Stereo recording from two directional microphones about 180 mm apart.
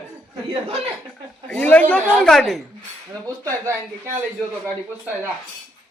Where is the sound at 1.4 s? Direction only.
5° left (ahead or behind).